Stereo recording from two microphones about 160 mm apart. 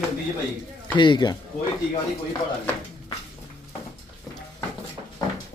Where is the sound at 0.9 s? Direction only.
30° left (ahead or behind).